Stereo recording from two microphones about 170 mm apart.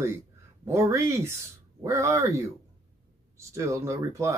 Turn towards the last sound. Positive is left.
turn(degrees=-15)  # may be behind; listen again after turning